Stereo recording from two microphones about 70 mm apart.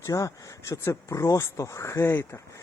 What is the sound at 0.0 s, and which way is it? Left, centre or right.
Speech, left.